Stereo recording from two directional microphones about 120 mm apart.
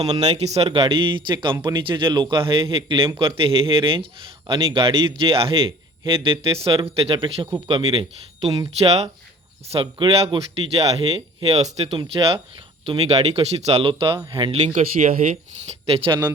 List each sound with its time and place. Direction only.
0.3 s a man's voice: 65° right (ahead or behind)
9.8 s a man's voice: 45° right (ahead or behind); by 11.9 s 65° right (ahead or behind)
11.9 s a man's voice: 50° right (ahead or behind)
14.8 s speech: 60° right (ahead or behind)